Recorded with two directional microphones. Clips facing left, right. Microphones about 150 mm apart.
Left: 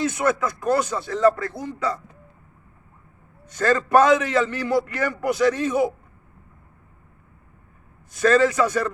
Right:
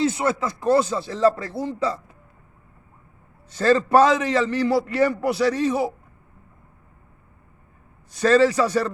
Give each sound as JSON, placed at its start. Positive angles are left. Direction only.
{"t": 0.0, "sound": "speech", "side_deg": -30}
{"t": 3.5, "sound": "a man's voice", "side_deg": -30}
{"t": 8.1, "sound": "a man's voice", "side_deg": -30}